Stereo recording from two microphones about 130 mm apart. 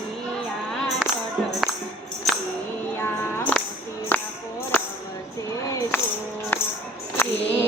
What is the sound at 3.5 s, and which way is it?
Music, 10° left (ahead or behind).